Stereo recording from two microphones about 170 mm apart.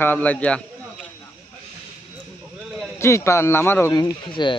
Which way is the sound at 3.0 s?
15° left (ahead or behind).